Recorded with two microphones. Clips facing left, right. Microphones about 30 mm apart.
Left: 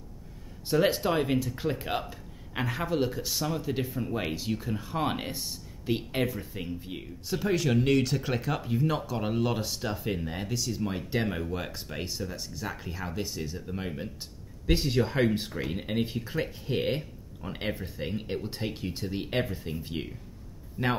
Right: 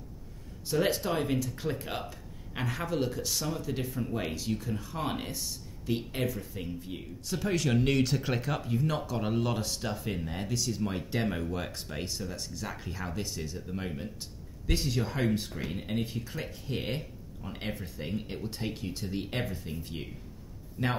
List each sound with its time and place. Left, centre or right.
0.7 s speech: centre
14.7 s speech: left